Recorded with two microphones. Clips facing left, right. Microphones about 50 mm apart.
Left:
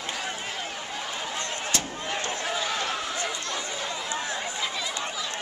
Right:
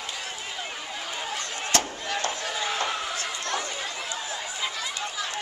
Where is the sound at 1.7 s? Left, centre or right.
Right.